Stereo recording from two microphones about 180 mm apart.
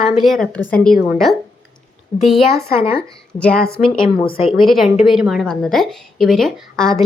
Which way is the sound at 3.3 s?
5° left (ahead or behind).